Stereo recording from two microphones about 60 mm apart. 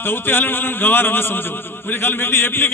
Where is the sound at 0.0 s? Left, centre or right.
Left.